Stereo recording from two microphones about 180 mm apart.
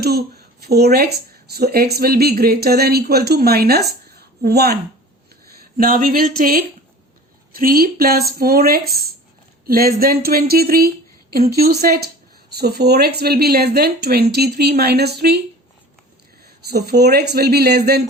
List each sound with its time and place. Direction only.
0.0 s speech: 60° right (ahead or behind)
5.7 s speech: 50° right (ahead or behind)
16.6 s speech: 65° right (ahead or behind)